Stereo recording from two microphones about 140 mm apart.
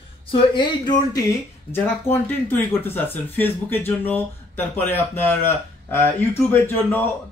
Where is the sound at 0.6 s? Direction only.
30° left (ahead or behind).